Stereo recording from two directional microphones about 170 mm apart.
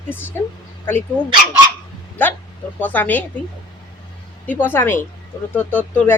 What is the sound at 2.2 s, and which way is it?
Speech, 10° left (ahead or behind).